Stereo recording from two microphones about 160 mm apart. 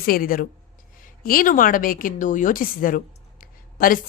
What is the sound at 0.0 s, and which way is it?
A woman's voice, 65° left (ahead or behind).